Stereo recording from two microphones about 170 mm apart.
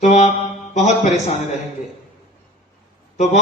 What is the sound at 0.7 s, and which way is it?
Speech, 45° left (ahead or behind).